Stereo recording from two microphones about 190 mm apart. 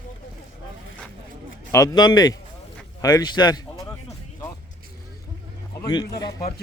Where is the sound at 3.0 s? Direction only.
20° left (ahead or behind).